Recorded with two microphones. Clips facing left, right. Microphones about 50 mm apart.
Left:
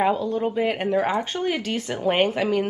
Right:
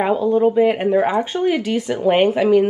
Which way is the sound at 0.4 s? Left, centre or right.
Centre.